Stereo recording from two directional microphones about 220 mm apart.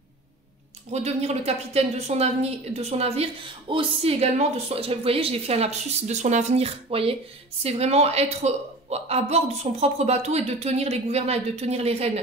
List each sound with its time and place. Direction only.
0.9 s a woman's voice: 30° right (ahead or behind)